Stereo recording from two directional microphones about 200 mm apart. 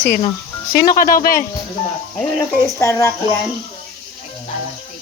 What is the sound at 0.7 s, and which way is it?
Speech, 45° left (ahead or behind).